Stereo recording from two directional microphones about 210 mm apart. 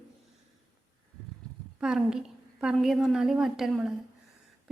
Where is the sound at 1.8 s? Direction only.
Centre (ahead or behind).